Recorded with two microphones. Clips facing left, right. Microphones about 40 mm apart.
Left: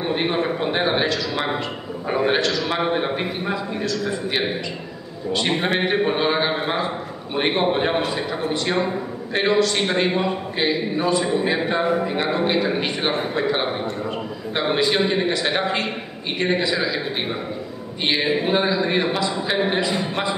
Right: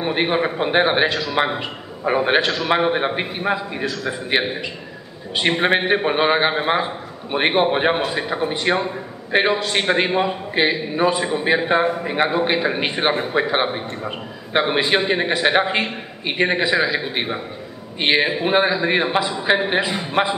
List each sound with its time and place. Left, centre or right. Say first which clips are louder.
0.0 s a man's voice: right 2 dB; right
5.6 s a man's voice: right 5 dB; right